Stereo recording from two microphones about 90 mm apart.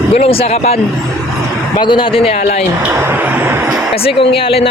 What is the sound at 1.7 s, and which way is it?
Speech, 65° left (ahead or behind).